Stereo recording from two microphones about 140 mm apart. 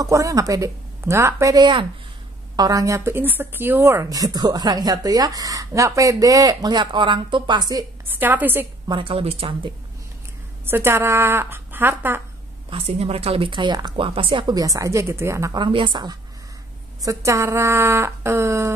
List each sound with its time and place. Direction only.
0.0 s speech: 25° right (ahead or behind)
8.2 s a woman's voice: 15° right (ahead or behind)
8.8 s a woman's voice: 35° right (ahead or behind)
10.6 s a woman's voice: 15° right (ahead or behind)
12.6 s a woman's voice: 45° right (ahead or behind); by 15.6 s 20° right (ahead or behind)
15.6 s a woman's voice: 35° right (ahead or behind); by 18.7 s 20° right (ahead or behind)